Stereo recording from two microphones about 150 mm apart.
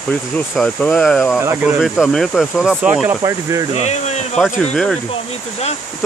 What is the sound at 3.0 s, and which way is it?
Speech, 20° right (ahead or behind).